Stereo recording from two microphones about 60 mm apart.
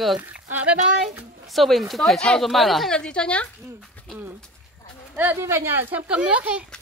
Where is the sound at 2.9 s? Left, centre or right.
Centre.